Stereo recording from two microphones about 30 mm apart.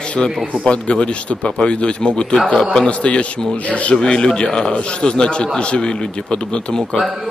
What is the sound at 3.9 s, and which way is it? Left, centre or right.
Speech, left.